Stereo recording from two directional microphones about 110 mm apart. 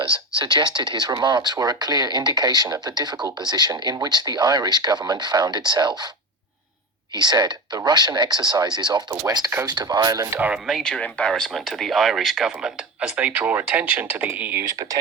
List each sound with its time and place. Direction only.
0.0 s speech: 45° right (ahead or behind)
7.2 s speech: 40° right (ahead or behind); by 10.5 s 25° right (ahead or behind)
10.5 s speech: centre (ahead or behind); by 14.9 s 30° right (ahead or behind)